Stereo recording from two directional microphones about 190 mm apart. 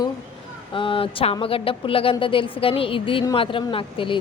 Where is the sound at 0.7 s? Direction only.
25° left (ahead or behind).